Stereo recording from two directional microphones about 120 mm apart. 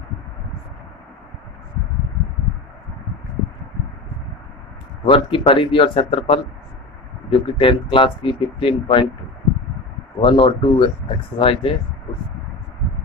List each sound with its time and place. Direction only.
5.0 s speech: 45° left (ahead or behind)
10.2 s speech: 45° left (ahead or behind)